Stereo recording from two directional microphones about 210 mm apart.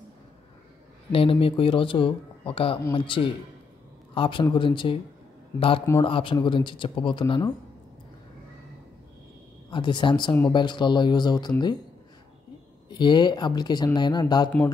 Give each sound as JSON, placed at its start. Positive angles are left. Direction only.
{"t": 1.1, "sound": "speech", "side_deg": 25}
{"t": 9.7, "sound": "speech", "side_deg": 20}
{"t": 12.9, "sound": "speech", "side_deg": 20}